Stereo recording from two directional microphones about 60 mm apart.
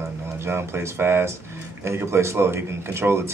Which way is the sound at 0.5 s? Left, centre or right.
Right.